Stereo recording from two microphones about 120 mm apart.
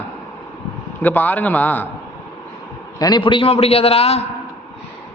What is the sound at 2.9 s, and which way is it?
Speech, 30° left (ahead or behind).